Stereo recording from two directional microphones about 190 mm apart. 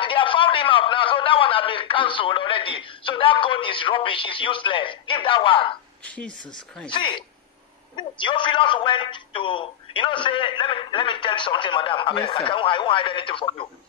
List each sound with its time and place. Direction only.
0.0 s a man's voice: 25° left (ahead or behind)
6.0 s speech: 5° left (ahead or behind)
6.9 s a man's voice: 25° left (ahead or behind)